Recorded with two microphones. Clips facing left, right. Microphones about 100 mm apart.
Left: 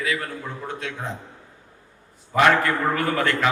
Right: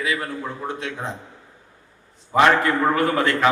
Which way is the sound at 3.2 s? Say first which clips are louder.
Right 2 dB; 20° right (ahead or behind).